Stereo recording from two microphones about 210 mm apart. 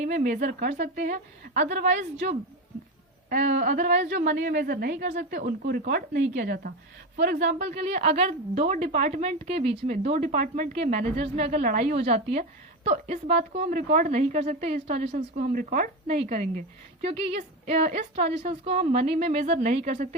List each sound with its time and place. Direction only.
0.0 s a woman's voice: 35° right (ahead or behind)
3.6 s a woman's voice: 35° right (ahead or behind)
7.4 s a woman's voice: 35° right (ahead or behind)